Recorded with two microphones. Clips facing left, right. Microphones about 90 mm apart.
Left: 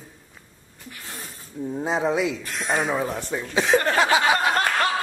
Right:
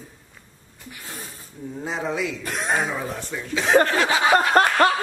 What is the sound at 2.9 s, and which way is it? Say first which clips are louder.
Speech: left 4 dB; 25° left (ahead or behind).